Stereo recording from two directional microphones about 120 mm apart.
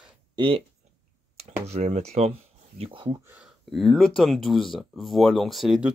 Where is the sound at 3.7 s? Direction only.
Centre (ahead or behind).